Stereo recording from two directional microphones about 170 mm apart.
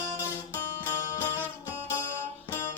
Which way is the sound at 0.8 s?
15° left (ahead or behind).